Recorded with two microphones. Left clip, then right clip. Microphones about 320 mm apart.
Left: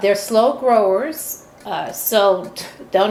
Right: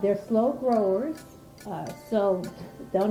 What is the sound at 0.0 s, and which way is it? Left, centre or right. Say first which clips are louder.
A woman's voice: left 10 dB; centre.